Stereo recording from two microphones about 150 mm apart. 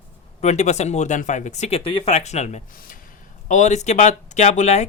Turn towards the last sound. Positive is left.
turn(degrees=50)  # may be behind; listen again after turning